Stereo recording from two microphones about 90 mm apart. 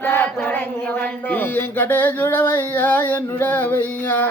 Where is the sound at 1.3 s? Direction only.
20° left (ahead or behind).